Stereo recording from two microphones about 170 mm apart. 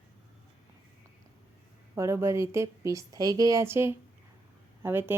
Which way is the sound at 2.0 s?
15° right (ahead or behind).